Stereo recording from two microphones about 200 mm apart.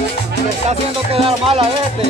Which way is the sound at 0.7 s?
30° right (ahead or behind).